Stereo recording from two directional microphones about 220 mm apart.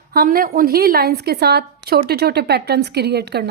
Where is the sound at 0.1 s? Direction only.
40° right (ahead or behind).